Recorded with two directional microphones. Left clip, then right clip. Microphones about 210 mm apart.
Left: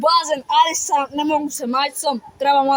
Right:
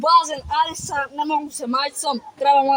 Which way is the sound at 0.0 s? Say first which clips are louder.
Even; 5° left (ahead or behind).